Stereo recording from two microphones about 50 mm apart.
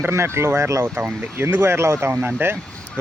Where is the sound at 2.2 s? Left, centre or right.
Right.